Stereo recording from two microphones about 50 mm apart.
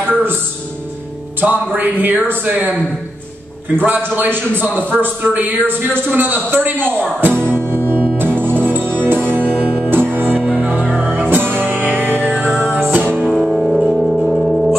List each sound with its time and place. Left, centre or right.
0.1 s music: right
1.4 s speech: right
4.1 s speech: right
4.7 s a man's voice: left
5.0 s speech: right
7.2 s music: right
10.4 s music: right
11.0 s music: right
13.4 s music: centre